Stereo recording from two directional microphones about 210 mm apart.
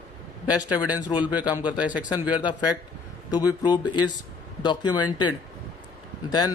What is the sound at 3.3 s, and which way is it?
Speech, 20° left (ahead or behind).